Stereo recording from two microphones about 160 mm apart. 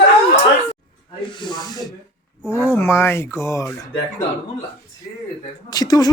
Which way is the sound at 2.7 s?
15° left (ahead or behind).